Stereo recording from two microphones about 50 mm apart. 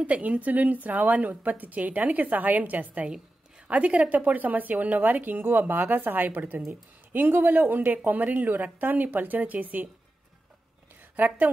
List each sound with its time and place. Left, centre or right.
0.0 s a woman's voice: right
11.1 s a woman's voice: right